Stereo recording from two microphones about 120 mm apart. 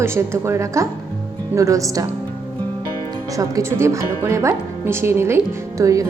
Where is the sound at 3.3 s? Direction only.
30° right (ahead or behind).